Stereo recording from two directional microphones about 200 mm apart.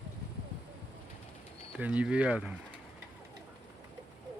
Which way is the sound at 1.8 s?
5° right (ahead or behind).